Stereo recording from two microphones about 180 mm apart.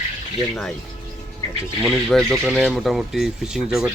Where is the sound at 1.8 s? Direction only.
Centre (ahead or behind).